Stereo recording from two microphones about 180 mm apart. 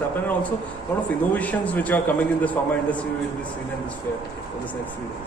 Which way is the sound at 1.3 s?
10° left (ahead or behind).